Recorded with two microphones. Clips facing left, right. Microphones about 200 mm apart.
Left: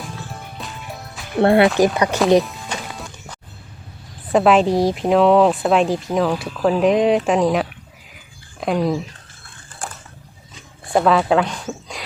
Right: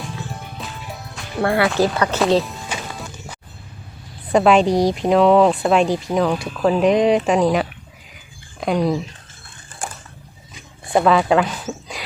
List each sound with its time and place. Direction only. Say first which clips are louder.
0.0 s music: right 2 dB; centre (ahead or behind)
1.4 s speech: left 5 dB; 25° left (ahead or behind)
1.8 s speech: left 2 dB; 15° left (ahead or behind)
2.4 s music: even; centre (ahead or behind)
4.3 s speech: even; centre (ahead or behind)
10.9 s speech: even; centre (ahead or behind)